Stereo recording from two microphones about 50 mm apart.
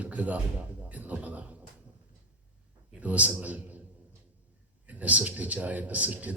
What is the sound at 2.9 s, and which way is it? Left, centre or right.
Speech, right.